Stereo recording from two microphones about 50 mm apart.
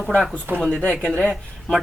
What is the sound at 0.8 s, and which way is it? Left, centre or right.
Speech, centre.